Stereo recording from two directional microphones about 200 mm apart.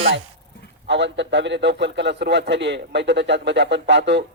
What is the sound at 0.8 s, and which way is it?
Speech, 60° right (ahead or behind).